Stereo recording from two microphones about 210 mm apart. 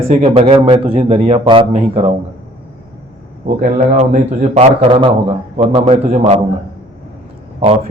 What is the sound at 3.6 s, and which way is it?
A man's voice, 35° right (ahead or behind).